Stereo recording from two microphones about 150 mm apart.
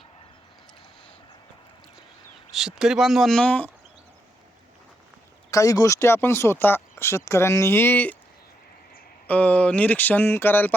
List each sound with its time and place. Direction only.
2.5 s speech: 5° right (ahead or behind)
5.5 s speech: 20° left (ahead or behind)
9.2 s speech: 10° left (ahead or behind)